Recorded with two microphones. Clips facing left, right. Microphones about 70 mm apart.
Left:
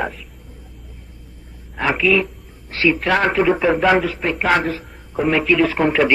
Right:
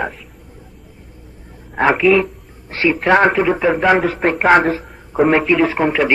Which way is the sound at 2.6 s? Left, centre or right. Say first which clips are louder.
Right 1 dB; right.